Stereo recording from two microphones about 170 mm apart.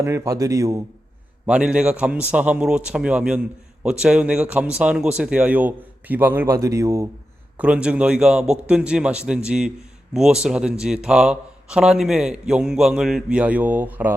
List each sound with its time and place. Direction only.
0.0 s a man's voice: 15° right (ahead or behind)
1.5 s a man's voice: 5° right (ahead or behind)